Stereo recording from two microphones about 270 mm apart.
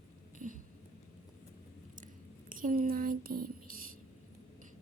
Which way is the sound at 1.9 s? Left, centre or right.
Right.